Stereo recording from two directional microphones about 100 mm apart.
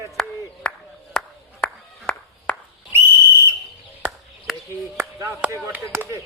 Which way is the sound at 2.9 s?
25° right (ahead or behind).